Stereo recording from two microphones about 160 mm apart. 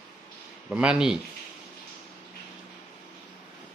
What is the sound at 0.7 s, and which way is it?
Speech, 5° right (ahead or behind).